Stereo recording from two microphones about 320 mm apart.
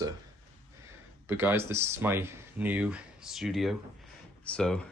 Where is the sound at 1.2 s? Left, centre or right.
Centre.